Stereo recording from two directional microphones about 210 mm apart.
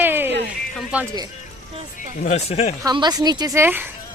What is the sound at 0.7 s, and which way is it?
Music, 5° right (ahead or behind).